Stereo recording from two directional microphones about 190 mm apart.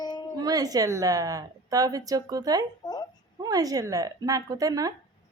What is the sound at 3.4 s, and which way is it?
A woman's voice, 20° right (ahead or behind).